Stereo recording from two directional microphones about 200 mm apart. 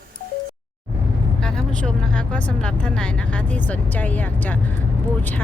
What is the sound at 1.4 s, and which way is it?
A woman's voice, 5° left (ahead or behind).